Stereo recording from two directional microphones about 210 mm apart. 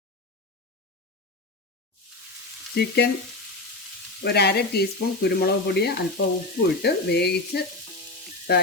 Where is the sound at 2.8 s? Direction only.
50° left (ahead or behind).